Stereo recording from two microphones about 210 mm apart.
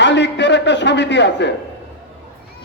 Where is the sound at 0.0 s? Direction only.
55° left (ahead or behind).